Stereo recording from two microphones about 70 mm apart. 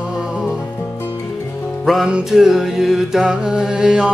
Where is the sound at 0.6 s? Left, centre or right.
Left.